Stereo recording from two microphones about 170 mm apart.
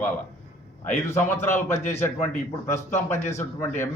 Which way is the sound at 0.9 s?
15° left (ahead or behind).